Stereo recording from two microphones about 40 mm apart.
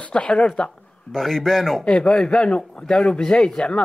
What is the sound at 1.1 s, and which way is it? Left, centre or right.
Speech, centre.